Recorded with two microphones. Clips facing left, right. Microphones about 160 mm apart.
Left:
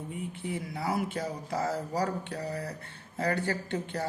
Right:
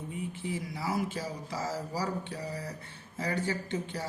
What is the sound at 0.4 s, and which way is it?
Speech, 55° left (ahead or behind).